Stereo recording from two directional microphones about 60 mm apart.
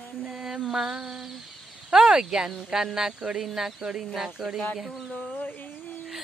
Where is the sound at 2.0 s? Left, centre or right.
Centre.